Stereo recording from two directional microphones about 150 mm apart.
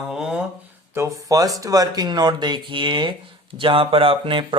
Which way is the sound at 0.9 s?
20° right (ahead or behind).